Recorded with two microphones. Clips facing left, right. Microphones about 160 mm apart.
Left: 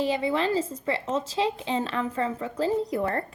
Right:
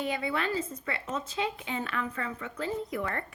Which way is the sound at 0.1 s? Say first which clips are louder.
Left 6 dB; 25° left (ahead or behind).